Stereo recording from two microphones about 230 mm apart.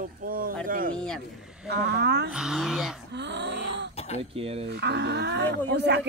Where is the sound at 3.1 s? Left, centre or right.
Right.